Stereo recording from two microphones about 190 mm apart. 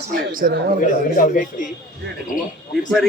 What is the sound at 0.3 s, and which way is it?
Speech, 50° right (ahead or behind).